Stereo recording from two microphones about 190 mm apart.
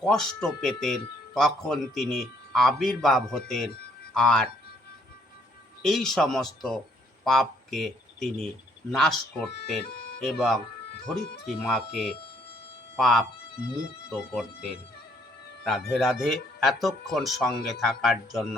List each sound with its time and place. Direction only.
0.0 s speech: 5° left (ahead or behind)
5.8 s speech: centre (ahead or behind)
13.0 s speech: centre (ahead or behind)